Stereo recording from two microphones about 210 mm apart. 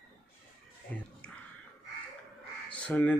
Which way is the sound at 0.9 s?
5° left (ahead or behind).